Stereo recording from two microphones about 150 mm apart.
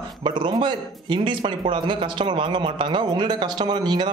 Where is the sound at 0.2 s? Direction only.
30° right (ahead or behind).